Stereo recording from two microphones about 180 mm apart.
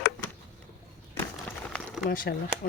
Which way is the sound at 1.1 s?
10° left (ahead or behind).